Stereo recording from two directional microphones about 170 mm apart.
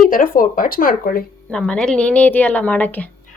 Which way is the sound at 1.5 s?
5° left (ahead or behind).